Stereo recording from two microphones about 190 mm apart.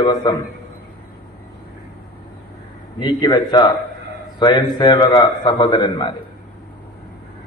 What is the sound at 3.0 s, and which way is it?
A man's voice, 25° left (ahead or behind).